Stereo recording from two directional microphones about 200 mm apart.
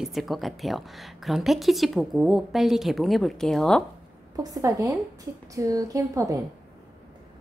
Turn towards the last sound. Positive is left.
turn(degrees=-15)  # may be behind; listen again after turning